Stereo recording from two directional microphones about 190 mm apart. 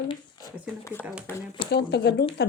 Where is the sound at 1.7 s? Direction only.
60° left (ahead or behind).